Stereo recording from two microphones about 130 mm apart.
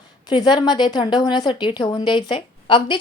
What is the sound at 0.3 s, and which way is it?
A woman's voice, 35° left (ahead or behind).